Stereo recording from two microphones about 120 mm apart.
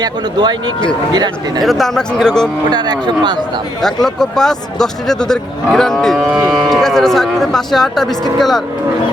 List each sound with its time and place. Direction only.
0.0 s speech: 35° right (ahead or behind)
1.6 s speech: centre (ahead or behind)
2.6 s speech: 35° right (ahead or behind)
3.8 s speech: 5° left (ahead or behind)